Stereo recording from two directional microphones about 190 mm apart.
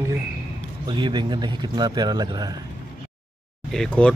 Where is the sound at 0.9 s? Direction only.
25° right (ahead or behind).